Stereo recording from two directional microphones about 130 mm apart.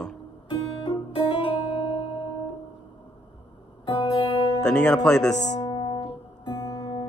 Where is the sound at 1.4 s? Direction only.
40° left (ahead or behind).